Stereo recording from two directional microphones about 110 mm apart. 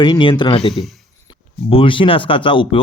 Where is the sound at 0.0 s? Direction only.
45° left (ahead or behind).